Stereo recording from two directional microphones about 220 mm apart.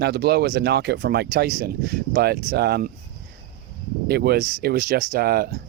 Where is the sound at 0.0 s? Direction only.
50° right (ahead or behind).